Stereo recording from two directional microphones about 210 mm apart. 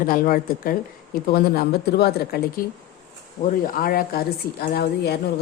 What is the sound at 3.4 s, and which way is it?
Speech, 40° left (ahead or behind).